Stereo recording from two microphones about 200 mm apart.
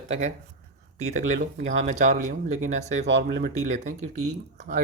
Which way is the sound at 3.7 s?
35° right (ahead or behind).